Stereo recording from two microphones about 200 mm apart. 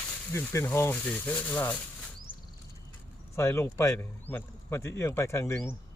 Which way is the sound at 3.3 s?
15° left (ahead or behind).